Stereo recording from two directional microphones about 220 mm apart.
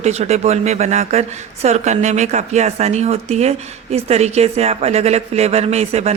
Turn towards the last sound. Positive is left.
turn(degrees=-30)  # may be behind; listen again after turning